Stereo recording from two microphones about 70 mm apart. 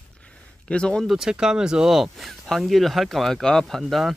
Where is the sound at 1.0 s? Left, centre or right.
Centre.